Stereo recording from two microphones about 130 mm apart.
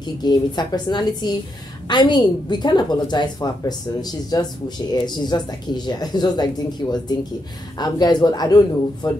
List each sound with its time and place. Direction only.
0.0 s a woman's voice: 35° left (ahead or behind)